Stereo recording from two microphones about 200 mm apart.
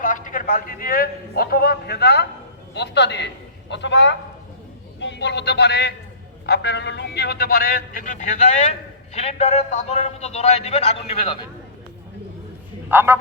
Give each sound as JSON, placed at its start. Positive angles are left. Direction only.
{"t": 0.0, "sound": "a man's voice", "side_deg": 40}
{"t": 12.9, "sound": "a man's voice", "side_deg": -10}